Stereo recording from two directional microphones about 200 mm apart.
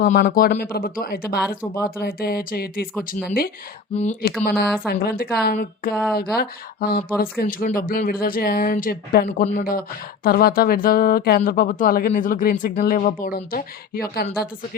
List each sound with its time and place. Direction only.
0.0 s speech: 50° left (ahead or behind)
3.9 s speech: 35° left (ahead or behind)
4.4 s speech: 55° left (ahead or behind)
9.5 s speech: 40° left (ahead or behind)